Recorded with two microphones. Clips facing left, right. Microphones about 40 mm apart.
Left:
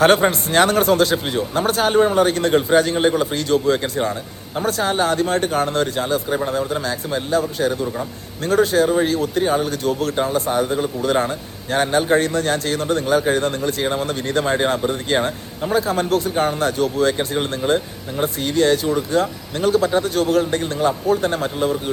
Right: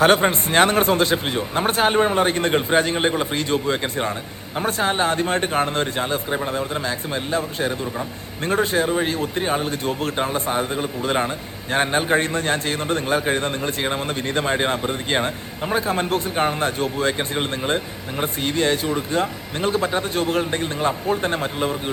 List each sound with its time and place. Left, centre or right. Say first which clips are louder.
0.0 s a man's voice: left 2 dB; right